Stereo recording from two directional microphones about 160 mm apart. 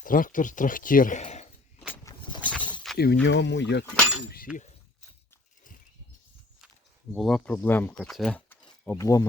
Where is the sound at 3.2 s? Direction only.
90° left.